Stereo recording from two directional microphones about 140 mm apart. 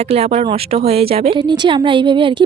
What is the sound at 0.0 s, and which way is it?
A woman's voice, 50° right (ahead or behind).